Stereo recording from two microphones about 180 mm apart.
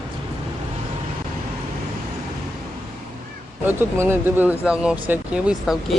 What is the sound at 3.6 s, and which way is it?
Speech, 10° right (ahead or behind).